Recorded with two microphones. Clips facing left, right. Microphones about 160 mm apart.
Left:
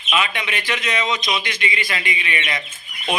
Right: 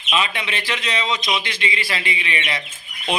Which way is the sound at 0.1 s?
30° right (ahead or behind).